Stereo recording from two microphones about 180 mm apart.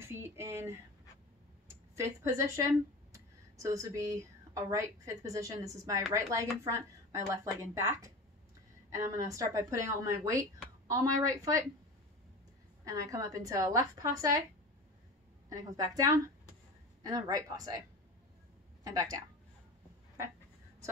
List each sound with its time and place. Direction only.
0.0 s a woman's voice: 15° right (ahead or behind)
12.8 s a woman's voice: 20° right (ahead or behind)
15.5 s a woman's voice: 20° right (ahead or behind)
18.9 s a woman's voice: 20° right (ahead or behind)